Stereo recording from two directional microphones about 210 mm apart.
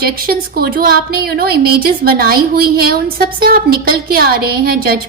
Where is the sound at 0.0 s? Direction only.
45° right (ahead or behind).